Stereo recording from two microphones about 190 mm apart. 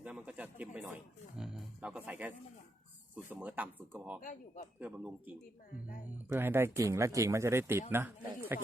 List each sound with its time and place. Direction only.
0.0 s speech: 5° right (ahead or behind)
4.2 s speech: 45° left (ahead or behind)
4.8 s speech: 5° right (ahead or behind)